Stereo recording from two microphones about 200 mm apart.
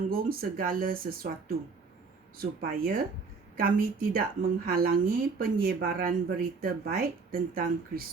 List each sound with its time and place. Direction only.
0.0 s speech: 45° right (ahead or behind)